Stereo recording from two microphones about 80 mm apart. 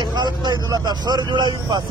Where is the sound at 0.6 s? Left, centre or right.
Right.